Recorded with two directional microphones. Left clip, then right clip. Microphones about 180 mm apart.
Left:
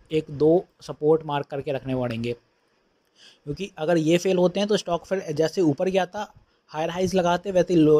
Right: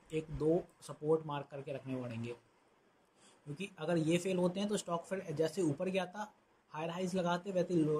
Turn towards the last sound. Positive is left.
turn(degrees=35)  # may be behind; listen again after turning